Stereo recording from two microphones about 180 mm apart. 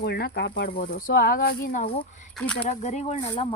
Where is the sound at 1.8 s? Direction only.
35° left (ahead or behind).